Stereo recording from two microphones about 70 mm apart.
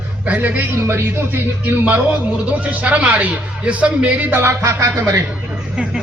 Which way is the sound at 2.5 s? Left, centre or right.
Right.